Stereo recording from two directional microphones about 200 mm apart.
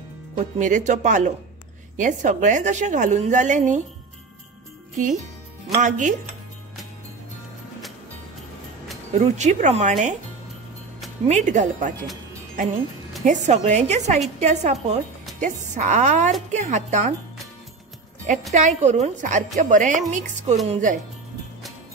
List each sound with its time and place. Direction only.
0.4 s a woman's voice: 40° right (ahead or behind)
4.9 s jingle bell: 40° right (ahead or behind)
5.8 s a woman's voice: 35° right (ahead or behind)
9.1 s a woman's voice: 35° right (ahead or behind)
11.2 s a woman's voice: 35° right (ahead or behind)
13.2 s a woman's voice: 35° right (ahead or behind)
18.5 s a woman's voice: 40° right (ahead or behind)